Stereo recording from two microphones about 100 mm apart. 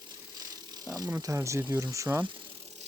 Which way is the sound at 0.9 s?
30° right (ahead or behind).